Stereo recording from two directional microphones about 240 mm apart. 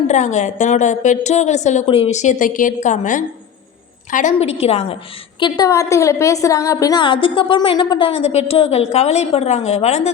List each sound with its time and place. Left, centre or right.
0.1 s a woman's voice: left